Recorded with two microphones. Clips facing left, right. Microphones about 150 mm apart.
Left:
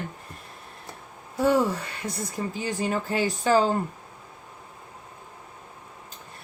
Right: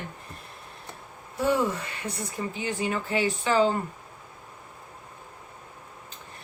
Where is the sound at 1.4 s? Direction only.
35° left (ahead or behind).